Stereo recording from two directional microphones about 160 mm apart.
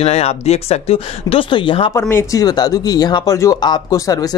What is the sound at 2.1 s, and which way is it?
Speech, 20° left (ahead or behind).